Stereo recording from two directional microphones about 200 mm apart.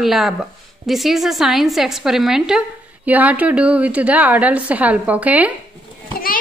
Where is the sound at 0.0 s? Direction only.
Centre (ahead or behind).